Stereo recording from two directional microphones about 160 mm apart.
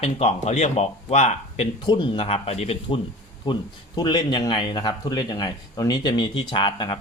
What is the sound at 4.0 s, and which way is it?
Speech, 25° left (ahead or behind).